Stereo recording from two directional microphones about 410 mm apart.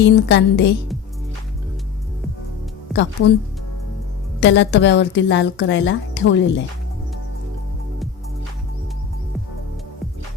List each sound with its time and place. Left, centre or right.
0.0 s speech: left
2.9 s speech: left
4.4 s speech: left